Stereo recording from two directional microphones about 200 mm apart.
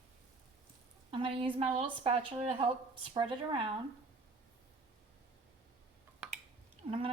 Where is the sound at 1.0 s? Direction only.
25° right (ahead or behind).